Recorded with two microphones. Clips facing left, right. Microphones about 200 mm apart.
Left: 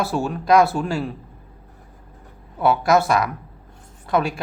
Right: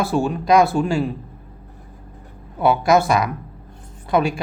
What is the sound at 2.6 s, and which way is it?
Speech, centre (ahead or behind).